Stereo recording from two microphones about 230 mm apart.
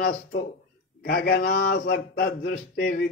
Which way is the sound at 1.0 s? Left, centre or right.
Left.